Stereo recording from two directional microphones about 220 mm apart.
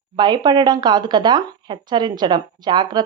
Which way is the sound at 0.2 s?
20° right (ahead or behind).